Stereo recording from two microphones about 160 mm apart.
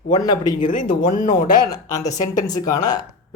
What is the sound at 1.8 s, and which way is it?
Speech, 20° left (ahead or behind).